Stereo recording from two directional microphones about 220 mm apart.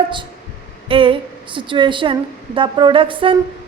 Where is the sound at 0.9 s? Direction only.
25° right (ahead or behind).